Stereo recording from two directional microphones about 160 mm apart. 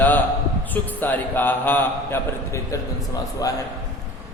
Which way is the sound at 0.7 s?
10° left (ahead or behind).